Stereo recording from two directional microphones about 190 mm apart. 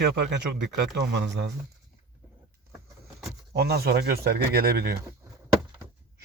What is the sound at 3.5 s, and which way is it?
Speech, 55° right (ahead or behind).